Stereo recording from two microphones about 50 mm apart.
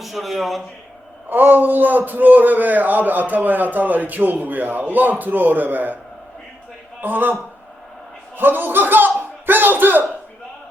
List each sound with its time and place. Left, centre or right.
0.0 s speech: centre
1.3 s a man's voice: right
7.0 s a man's voice: right
8.4 s speech: right